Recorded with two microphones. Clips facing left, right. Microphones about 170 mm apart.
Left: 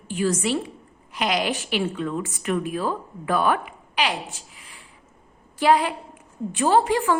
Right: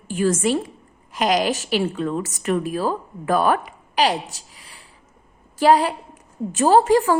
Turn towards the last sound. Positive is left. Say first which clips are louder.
# right 4 dB
turn(degrees=-40)  # may be behind; listen again after turning